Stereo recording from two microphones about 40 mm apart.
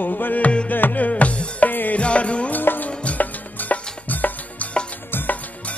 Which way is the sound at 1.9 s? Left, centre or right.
Left.